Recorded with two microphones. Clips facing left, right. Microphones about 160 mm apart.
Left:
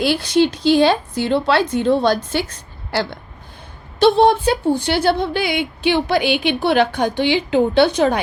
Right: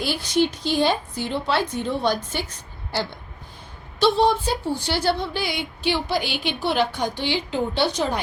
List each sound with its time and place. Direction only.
0.0 s a woman's voice: 80° left
4.0 s a woman's voice: 60° left (ahead or behind)